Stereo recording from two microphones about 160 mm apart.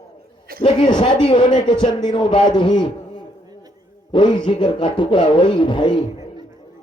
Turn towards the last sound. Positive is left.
turn(degrees=30)  # may be behind; listen again after turning